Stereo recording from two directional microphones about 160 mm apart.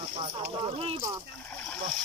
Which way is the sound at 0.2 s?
35° right (ahead or behind).